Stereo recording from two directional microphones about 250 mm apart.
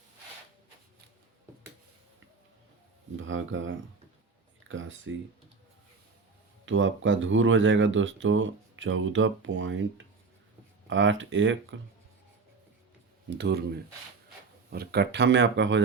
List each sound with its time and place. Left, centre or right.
3.2 s speech: right
6.7 s speech: right
10.8 s speech: right
14.7 s speech: right